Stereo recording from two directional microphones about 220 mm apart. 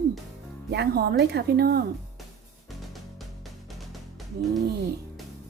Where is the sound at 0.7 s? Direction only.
50° right (ahead or behind).